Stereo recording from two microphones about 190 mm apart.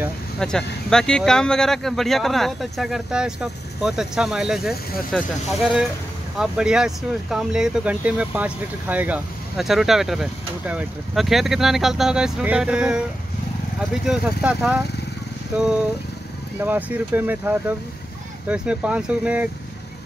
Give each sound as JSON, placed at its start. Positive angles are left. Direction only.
{"t": 0.4, "sound": "speech", "side_deg": 5}
{"t": 14.0, "sound": "speech", "side_deg": -5}
{"t": 16.6, "sound": "speech", "side_deg": -10}